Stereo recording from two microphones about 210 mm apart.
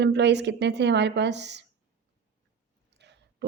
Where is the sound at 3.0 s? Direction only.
55° right (ahead or behind).